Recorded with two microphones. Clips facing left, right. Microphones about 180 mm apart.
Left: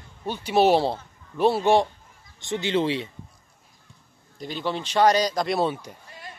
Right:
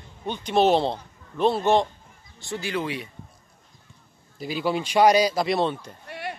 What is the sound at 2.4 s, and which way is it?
Speech, 20° left (ahead or behind).